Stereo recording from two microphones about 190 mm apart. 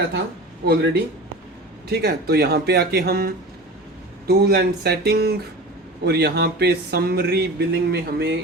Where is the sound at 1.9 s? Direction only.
60° right (ahead or behind).